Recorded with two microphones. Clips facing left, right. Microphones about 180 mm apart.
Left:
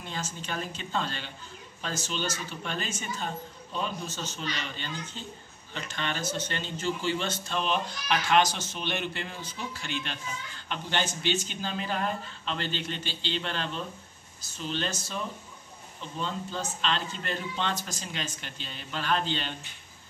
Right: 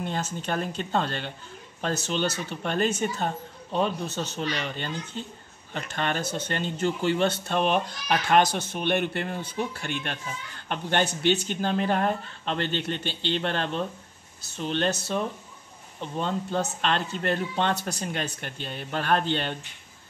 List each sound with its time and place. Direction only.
0.0 s speech: 55° right (ahead or behind)